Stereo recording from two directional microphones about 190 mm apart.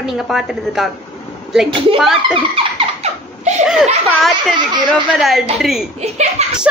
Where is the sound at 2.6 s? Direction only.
30° right (ahead or behind).